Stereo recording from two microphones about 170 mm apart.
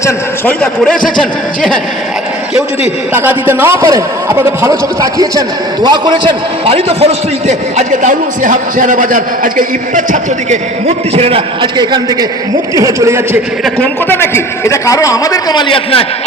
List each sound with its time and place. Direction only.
0.6 s speech: 5° left (ahead or behind)
3.1 s a man's voice: 10° right (ahead or behind)
13.7 s a man's voice: 10° left (ahead or behind); by 16.0 s 30° left (ahead or behind)